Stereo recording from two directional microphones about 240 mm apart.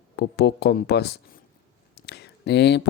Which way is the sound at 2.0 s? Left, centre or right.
Left.